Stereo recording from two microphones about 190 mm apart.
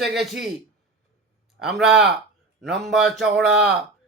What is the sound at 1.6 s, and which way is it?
A man's voice, centre (ahead or behind).